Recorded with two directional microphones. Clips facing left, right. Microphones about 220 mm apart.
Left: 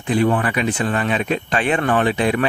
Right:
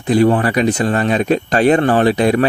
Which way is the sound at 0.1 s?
40° right (ahead or behind).